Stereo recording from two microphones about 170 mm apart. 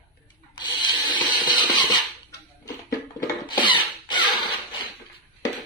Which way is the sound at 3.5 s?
30° left (ahead or behind).